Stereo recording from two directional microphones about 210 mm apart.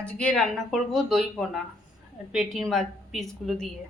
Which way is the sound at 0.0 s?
5° left (ahead or behind).